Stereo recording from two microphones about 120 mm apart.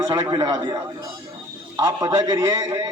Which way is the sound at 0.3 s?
30° right (ahead or behind).